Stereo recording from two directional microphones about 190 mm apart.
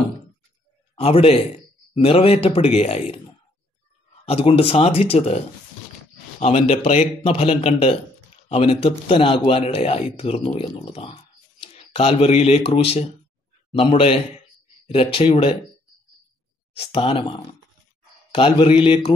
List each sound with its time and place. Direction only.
0.9 s speech: 30° left (ahead or behind)
4.3 s speech: 30° left (ahead or behind)
6.4 s speech: 35° left (ahead or behind)
16.7 s speech: 30° left (ahead or behind)